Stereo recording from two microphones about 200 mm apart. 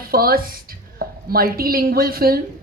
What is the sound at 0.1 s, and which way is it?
A woman's voice, 50° right (ahead or behind).